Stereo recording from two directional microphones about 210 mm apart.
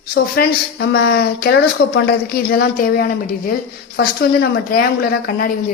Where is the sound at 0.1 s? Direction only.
50° left (ahead or behind).